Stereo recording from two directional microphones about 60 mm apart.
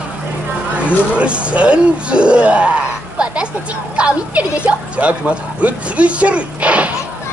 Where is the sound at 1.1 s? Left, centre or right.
Centre.